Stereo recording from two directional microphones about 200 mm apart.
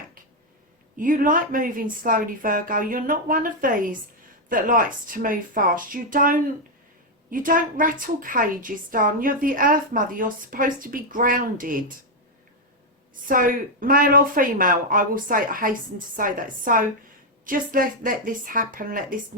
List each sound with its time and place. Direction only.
0.9 s a woman's voice: 40° right (ahead or behind)
13.2 s a woman's voice: 45° right (ahead or behind)